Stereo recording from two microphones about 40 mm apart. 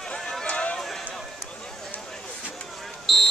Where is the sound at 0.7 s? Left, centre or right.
Centre.